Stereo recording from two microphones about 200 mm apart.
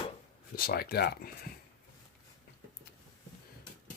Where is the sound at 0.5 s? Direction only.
50° left (ahead or behind).